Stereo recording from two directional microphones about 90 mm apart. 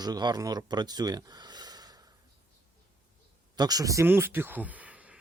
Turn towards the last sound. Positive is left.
turn(degrees=-15)  # may be behind; listen again after turning